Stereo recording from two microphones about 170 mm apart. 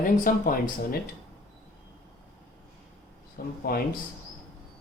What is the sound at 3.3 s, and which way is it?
Speech, 60° left (ahead or behind).